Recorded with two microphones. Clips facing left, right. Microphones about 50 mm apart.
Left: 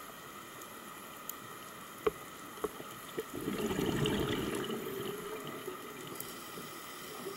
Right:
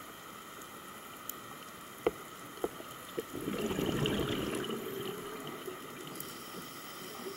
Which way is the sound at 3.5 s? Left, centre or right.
Right.